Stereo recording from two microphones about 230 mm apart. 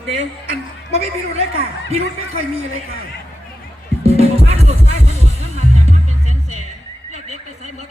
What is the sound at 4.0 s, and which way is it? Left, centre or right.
Music, right.